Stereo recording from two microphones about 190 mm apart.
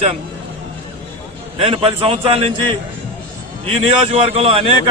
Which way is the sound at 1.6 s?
30° right (ahead or behind).